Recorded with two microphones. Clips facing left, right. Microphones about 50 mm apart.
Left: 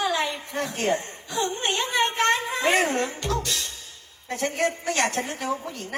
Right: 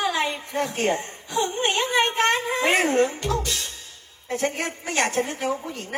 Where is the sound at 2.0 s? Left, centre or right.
Right.